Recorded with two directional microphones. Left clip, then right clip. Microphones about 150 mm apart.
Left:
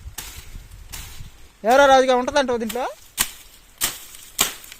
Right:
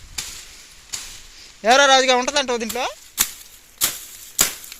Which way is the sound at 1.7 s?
20° left (ahead or behind).